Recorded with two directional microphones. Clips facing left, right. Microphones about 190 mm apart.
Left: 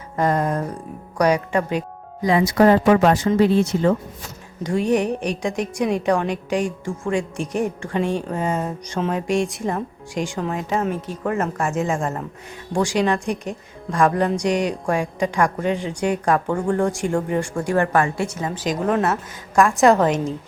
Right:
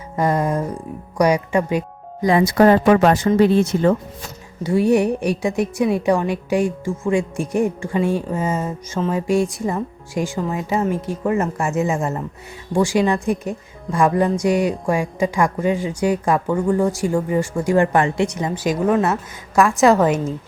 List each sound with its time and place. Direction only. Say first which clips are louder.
0.2 s speech: right 1 dB; 10° right (ahead or behind)
2.6 s speech: right 1 dB; 50° right (ahead or behind)
4.6 s speech: right 4 dB; 10° right (ahead or behind)